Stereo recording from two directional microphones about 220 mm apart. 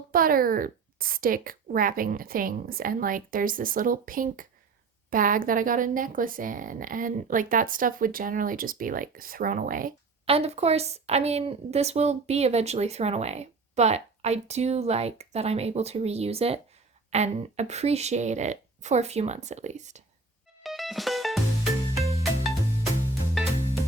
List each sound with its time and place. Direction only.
0.1 s speech: 40° right (ahead or behind)
10.2 s a woman's voice: 25° right (ahead or behind)
20.7 s music: centre (ahead or behind)